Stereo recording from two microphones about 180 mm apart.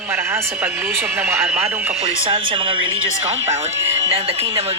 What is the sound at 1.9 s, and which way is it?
Speech, 35° right (ahead or behind).